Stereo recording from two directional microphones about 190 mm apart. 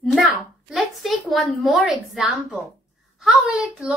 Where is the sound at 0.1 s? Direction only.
Centre (ahead or behind).